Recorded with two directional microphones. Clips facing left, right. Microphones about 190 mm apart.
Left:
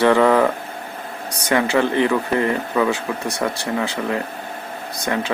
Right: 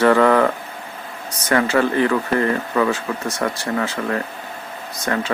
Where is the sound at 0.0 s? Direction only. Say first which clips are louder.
Even; 15° left (ahead or behind).